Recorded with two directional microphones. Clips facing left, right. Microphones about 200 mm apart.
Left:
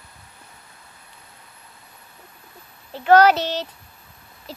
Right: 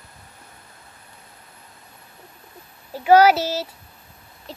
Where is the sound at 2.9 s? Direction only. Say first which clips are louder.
Right 1 dB; 10° right (ahead or behind).